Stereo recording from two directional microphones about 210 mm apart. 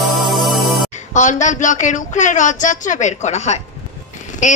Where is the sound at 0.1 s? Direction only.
Centre (ahead or behind).